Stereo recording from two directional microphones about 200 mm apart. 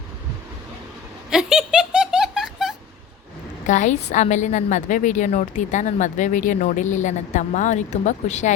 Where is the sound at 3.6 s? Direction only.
35° left (ahead or behind).